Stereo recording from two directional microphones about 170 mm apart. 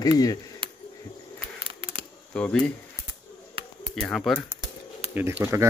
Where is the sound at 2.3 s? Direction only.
5° left (ahead or behind).